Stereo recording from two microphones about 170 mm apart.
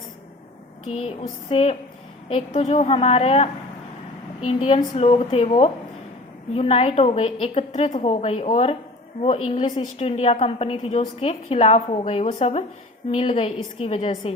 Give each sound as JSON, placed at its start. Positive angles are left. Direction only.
{"t": 1.5, "sound": "a woman's voice", "side_deg": 40}